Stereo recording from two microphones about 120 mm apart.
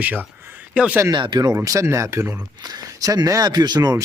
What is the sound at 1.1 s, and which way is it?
Speech, 40° right (ahead or behind).